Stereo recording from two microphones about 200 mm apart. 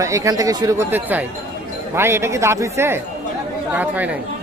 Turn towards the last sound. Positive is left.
turn(degrees=-10)  # may be behind; listen again after turning